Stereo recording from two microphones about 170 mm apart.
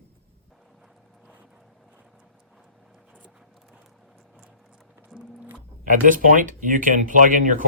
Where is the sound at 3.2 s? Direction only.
5° right (ahead or behind).